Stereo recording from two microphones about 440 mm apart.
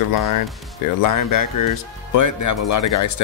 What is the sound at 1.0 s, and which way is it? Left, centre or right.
Speech, left.